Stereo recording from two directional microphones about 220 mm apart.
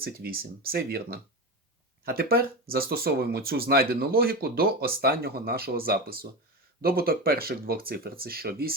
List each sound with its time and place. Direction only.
0.0 s speech: 45° right (ahead or behind)